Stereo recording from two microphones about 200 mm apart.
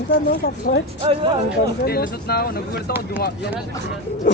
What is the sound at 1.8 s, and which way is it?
Speech, 50° left (ahead or behind).